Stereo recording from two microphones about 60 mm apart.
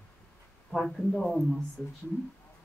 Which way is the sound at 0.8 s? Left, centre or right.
Centre.